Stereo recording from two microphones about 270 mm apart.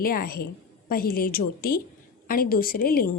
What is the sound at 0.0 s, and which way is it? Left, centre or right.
A woman's voice, left.